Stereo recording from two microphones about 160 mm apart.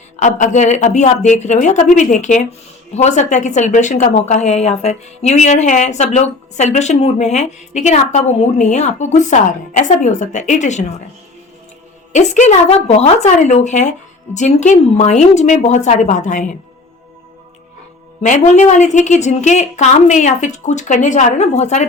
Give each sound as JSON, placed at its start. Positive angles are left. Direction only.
{"t": 0.2, "sound": "a woman's voice", "side_deg": 50}
{"t": 12.1, "sound": "a woman's voice", "side_deg": 50}
{"t": 18.2, "sound": "a woman's voice", "side_deg": 45}